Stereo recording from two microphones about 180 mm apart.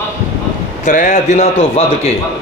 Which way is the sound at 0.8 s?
45° left (ahead or behind).